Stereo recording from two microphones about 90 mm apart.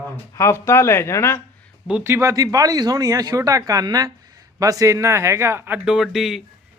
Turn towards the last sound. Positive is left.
turn(degrees=-5)  # may be behind; listen again after turning